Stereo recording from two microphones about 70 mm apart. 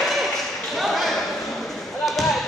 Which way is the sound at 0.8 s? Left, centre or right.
Centre.